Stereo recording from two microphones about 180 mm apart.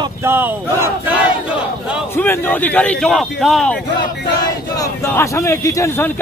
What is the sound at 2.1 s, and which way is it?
Speech, 10° left (ahead or behind).